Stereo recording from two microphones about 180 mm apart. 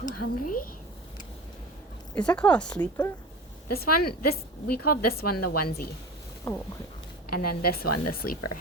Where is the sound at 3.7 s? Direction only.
60° left (ahead or behind).